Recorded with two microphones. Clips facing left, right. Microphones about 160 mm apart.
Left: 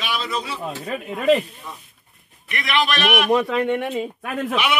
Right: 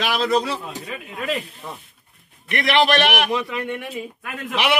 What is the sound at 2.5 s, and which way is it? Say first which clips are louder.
Speech: right 4 dB; 70° right (ahead or behind).